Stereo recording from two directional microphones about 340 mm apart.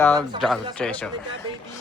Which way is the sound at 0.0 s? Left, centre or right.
Centre.